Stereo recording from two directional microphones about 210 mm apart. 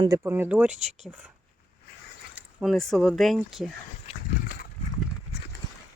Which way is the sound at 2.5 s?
Centre (ahead or behind).